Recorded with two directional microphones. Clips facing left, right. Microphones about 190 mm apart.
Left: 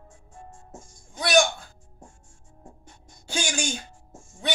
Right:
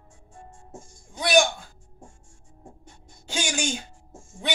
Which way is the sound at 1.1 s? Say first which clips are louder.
Right 1 dB; 15° right (ahead or behind).